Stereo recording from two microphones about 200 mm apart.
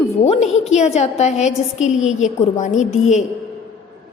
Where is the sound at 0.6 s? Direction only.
35° left (ahead or behind).